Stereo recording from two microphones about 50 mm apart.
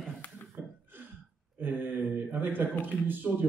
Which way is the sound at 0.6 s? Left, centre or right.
Right.